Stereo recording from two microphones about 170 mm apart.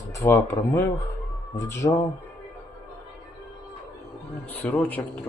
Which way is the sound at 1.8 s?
25° left (ahead or behind).